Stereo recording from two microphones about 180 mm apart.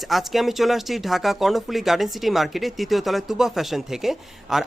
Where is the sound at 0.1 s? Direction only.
Centre (ahead or behind).